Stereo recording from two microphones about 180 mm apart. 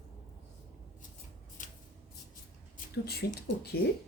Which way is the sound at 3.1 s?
60° left (ahead or behind).